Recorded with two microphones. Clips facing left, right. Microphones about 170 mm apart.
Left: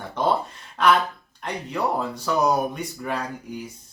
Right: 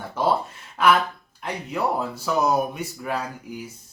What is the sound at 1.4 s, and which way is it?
Speech, 5° right (ahead or behind).